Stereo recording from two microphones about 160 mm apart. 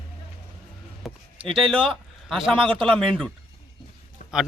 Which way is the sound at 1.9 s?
Centre (ahead or behind).